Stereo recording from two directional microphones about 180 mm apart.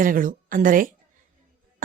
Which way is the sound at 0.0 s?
50° right (ahead or behind).